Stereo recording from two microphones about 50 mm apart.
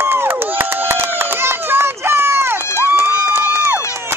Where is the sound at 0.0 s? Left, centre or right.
Right.